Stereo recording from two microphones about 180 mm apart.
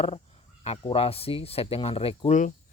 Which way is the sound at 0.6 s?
35° left (ahead or behind).